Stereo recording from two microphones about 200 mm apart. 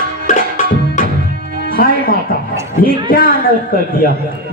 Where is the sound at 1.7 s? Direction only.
45° left (ahead or behind).